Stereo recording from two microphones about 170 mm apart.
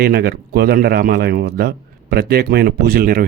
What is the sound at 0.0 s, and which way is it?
Speech, 65° right (ahead or behind).